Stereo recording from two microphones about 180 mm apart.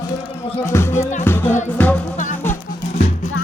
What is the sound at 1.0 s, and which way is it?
Music, 40° left (ahead or behind).